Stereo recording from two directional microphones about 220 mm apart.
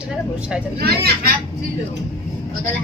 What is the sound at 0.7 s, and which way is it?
Speech, 45° right (ahead or behind).